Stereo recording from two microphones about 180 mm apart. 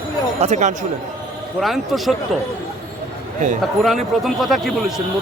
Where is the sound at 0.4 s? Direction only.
40° right (ahead or behind).